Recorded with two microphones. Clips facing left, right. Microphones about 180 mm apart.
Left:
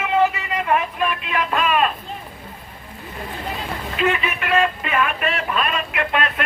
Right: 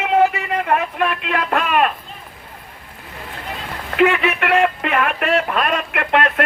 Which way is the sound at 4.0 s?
70° right (ahead or behind).